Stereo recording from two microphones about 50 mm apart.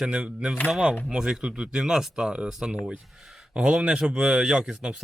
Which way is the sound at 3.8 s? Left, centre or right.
Centre.